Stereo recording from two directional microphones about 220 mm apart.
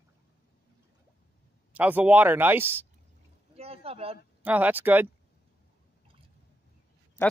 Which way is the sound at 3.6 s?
25° right (ahead or behind).